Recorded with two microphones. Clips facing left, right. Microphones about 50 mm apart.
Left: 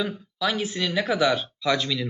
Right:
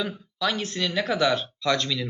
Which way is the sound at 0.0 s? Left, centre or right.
Centre.